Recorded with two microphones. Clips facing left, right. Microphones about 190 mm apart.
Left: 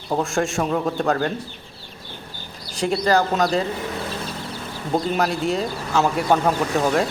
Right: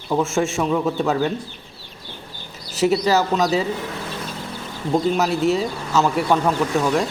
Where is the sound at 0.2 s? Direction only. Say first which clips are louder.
Right 2 dB; centre (ahead or behind).